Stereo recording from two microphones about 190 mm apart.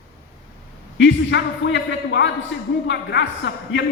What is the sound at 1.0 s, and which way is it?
A man's voice, 70° left (ahead or behind).